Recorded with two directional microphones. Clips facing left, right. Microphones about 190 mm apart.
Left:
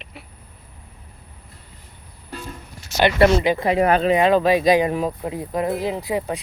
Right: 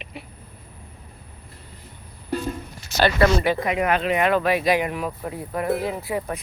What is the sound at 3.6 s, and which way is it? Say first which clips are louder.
Speech: left 5 dB; 35° left (ahead or behind).